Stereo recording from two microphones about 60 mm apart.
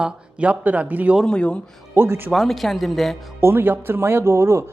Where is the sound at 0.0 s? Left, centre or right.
Right.